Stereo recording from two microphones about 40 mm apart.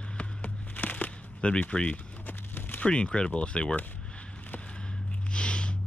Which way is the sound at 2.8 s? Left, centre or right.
Left.